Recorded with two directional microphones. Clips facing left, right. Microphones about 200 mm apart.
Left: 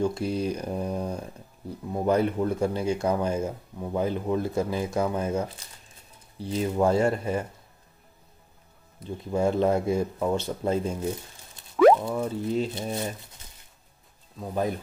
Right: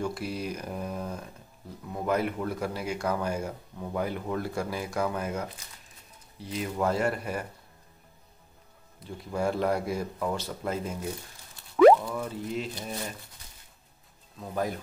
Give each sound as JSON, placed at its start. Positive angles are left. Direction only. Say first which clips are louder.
{"t": 0.0, "sound": "speech", "louder": "left 6 dB", "side_deg": 25}
{"t": 9.3, "sound": "speech", "louder": "left 4 dB", "side_deg": 25}
{"t": 11.7, "sound": "a sound", "louder": "even", "side_deg": 0}
{"t": 12.0, "sound": "speech", "louder": "left 5 dB", "side_deg": 25}
{"t": 14.4, "sound": "speech", "louder": "left 3 dB", "side_deg": 20}